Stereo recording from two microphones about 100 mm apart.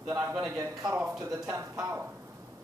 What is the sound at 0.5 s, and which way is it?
Speech, 35° right (ahead or behind).